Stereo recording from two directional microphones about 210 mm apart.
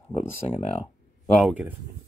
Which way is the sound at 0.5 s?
30° left (ahead or behind).